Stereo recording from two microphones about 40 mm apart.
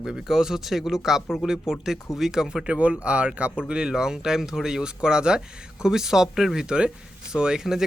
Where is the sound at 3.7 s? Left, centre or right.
Centre.